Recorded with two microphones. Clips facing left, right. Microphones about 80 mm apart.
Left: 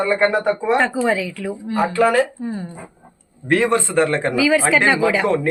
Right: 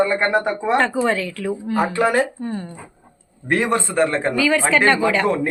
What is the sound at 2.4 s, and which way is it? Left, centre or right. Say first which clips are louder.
Speech: left 1 dB; centre.